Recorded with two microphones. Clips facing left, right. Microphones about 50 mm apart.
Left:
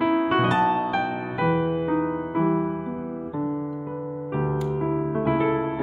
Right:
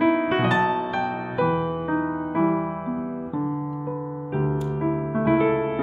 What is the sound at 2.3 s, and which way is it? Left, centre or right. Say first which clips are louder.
Music: right 1 dB; right.